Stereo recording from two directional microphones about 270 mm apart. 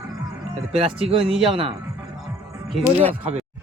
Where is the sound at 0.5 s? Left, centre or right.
Right.